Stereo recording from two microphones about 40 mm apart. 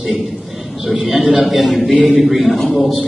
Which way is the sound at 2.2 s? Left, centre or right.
Centre.